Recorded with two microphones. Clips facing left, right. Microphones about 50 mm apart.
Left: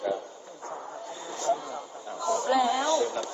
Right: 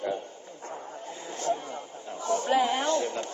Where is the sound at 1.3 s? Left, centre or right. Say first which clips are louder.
Left 2 dB; right.